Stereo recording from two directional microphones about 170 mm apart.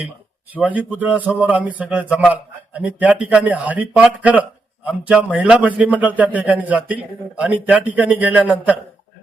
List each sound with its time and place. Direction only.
0.5 s a man's voice: 10° right (ahead or behind)